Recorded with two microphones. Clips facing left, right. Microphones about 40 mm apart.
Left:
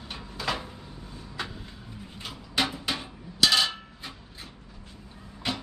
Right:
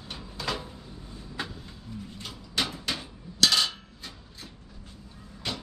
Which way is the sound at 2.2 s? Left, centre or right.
Centre.